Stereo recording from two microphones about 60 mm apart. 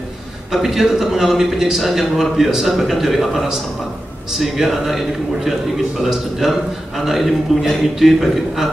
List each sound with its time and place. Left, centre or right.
0.5 s a man's voice: centre